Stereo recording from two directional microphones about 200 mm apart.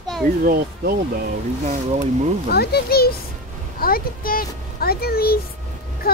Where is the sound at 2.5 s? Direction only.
50° left (ahead or behind).